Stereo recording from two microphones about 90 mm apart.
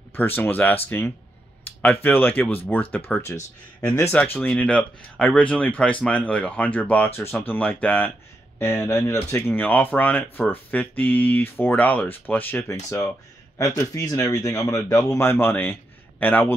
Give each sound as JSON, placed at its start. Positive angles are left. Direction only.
{"t": 0.4, "sound": "speech", "side_deg": 20}
{"t": 4.1, "sound": "speech", "side_deg": 20}
{"t": 9.6, "sound": "speech", "side_deg": 20}
{"t": 12.7, "sound": "speech", "side_deg": 30}